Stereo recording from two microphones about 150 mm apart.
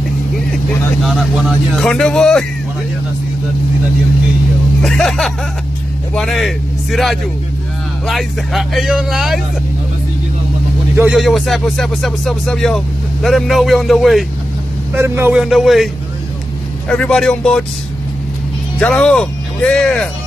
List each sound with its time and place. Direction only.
1.0 s speech: centre (ahead or behind)
4.8 s speech: 5° left (ahead or behind)
11.1 s speech: centre (ahead or behind)
15.0 s a man's voice: 15° right (ahead or behind)
15.3 s speech: centre (ahead or behind)
16.9 s speech: 5° left (ahead or behind)
18.8 s speech: 5° left (ahead or behind)